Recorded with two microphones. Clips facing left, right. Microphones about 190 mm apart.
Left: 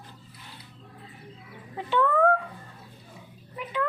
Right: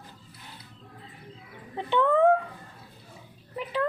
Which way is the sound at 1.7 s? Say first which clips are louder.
Right 1 dB; 20° right (ahead or behind).